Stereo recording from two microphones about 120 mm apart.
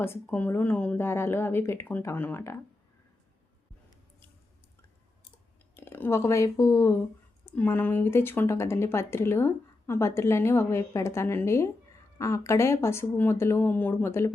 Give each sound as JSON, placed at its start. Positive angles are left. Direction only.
{"t": 0.0, "sound": "speech", "side_deg": 15}
{"t": 5.7, "sound": "speech", "side_deg": 20}